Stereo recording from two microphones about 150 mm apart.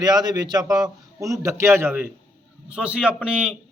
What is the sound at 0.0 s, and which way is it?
A man's voice, 25° right (ahead or behind).